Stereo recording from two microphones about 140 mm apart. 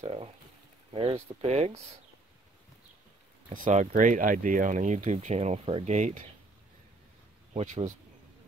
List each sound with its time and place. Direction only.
0.0 s speech: 45° right (ahead or behind)
3.4 s speech: 65° right (ahead or behind)
7.5 s speech: 55° right (ahead or behind)